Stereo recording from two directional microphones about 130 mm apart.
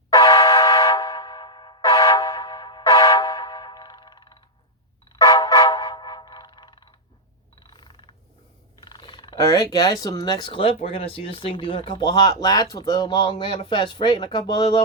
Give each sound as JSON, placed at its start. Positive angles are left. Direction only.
{"t": 0.1, "sound": "vehicle horn", "side_deg": 35}
{"t": 5.1, "sound": "vehicle", "side_deg": 30}
{"t": 7.7, "sound": "a sound", "side_deg": 35}
{"t": 8.8, "sound": "speech", "side_deg": 35}